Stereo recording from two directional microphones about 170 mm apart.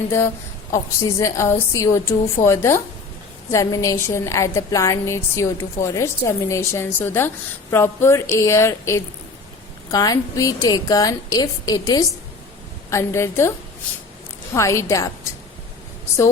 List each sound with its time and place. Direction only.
0.7 s a woman's voice: 15° left (ahead or behind)
14.5 s a woman's voice: 15° left (ahead or behind)